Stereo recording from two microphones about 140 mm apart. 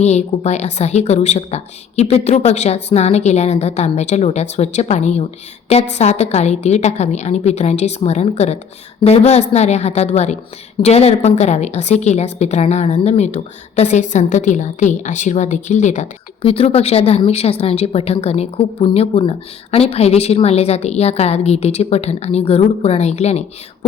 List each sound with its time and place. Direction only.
0.0 s a woman's voice: 55° left (ahead or behind)
16.4 s a woman's voice: 45° left (ahead or behind)